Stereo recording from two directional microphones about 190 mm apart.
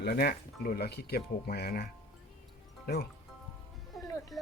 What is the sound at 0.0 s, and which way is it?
Speech, 55° left (ahead or behind).